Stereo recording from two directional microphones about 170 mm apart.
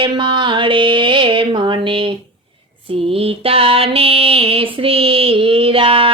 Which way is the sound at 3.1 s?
35° right (ahead or behind).